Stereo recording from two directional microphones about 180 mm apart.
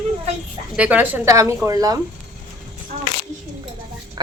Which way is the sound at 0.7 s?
10° right (ahead or behind).